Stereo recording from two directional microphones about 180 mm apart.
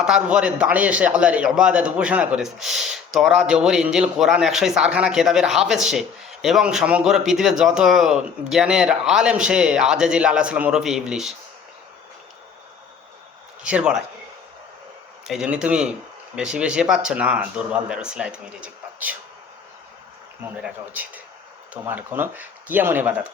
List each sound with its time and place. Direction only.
0.0 s a man's voice: 5° right (ahead or behind)
13.7 s a man's voice: 5° right (ahead or behind)
15.3 s a man's voice: 5° right (ahead or behind)
20.6 s speech: 10° right (ahead or behind)